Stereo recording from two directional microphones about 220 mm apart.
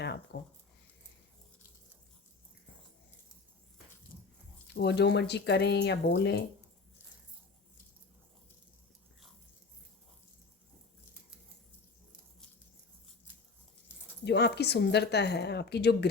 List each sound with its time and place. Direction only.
0.3 s speech: 50° left (ahead or behind)
4.7 s a woman's voice: 50° left (ahead or behind)
14.3 s a woman's voice: 50° left (ahead or behind)